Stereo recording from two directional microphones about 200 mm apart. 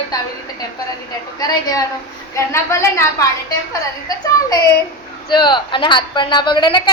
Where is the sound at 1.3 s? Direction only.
20° left (ahead or behind).